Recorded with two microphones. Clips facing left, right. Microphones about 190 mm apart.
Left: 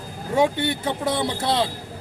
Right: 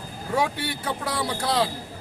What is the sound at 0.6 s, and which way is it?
A man's voice, 25° left (ahead or behind).